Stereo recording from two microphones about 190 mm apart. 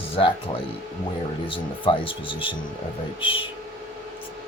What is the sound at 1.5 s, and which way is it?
Speech, 25° left (ahead or behind).